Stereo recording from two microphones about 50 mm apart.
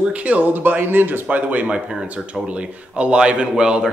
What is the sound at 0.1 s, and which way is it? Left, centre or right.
Speech, right.